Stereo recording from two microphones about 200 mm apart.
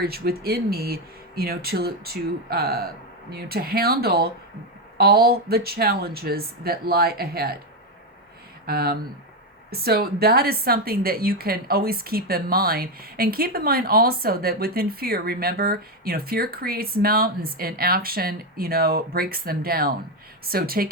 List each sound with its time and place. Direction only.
0.0 s a woman's voice: 50° right (ahead or behind)
8.6 s a woman's voice: 50° right (ahead or behind)